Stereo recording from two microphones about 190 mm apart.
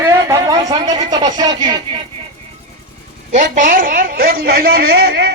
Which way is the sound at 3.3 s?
40° right (ahead or behind).